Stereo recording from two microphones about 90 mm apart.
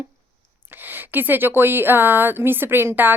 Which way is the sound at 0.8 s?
20° right (ahead or behind).